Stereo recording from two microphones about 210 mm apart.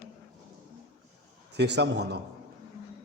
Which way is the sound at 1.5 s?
55° right (ahead or behind).